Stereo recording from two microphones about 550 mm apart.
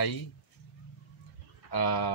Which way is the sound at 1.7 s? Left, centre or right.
Left.